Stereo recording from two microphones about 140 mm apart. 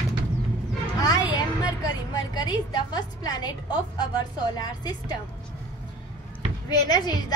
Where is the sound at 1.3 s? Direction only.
30° left (ahead or behind).